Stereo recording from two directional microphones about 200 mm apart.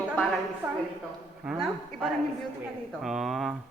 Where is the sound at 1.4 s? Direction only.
Centre (ahead or behind).